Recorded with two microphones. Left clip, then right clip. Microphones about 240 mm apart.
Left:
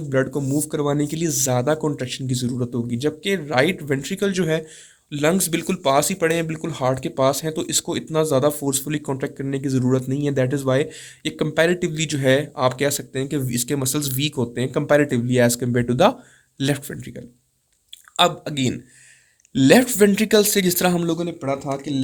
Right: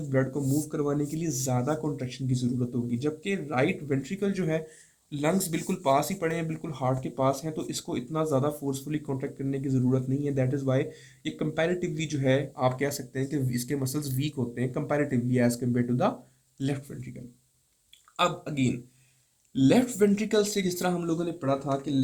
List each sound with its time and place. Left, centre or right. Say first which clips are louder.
0.1 s speech: left 7 dB; left
18.2 s speech: left 8 dB; left